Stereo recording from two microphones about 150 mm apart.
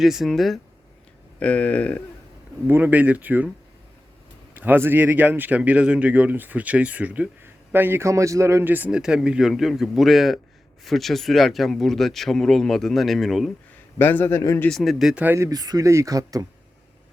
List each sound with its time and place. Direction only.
0.0 s a man's voice: centre (ahead or behind)
2.6 s speech: 15° right (ahead or behind)
4.5 s speech: 10° right (ahead or behind)
14.0 s a man's voice: 15° left (ahead or behind)
14.7 s speech: centre (ahead or behind); by 16.5 s 25° right (ahead or behind)